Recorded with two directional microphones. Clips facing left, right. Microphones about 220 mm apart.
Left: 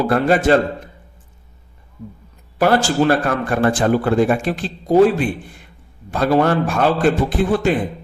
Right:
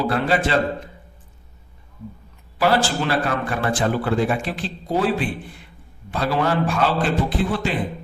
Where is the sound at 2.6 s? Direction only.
45° left (ahead or behind).